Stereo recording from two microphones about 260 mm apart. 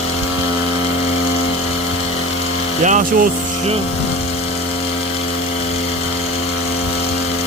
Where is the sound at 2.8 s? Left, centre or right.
Right.